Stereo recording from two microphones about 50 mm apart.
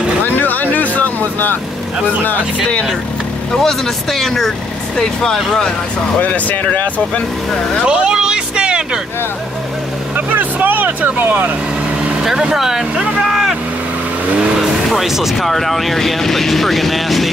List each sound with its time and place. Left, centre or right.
0.3 s vehicle: left
3.5 s speech: centre
6.2 s speech: left
7.8 s vehicle: centre
10.1 s vehicle: right
12.2 s speech: centre
13.3 s vehicle: centre
14.9 s speech: centre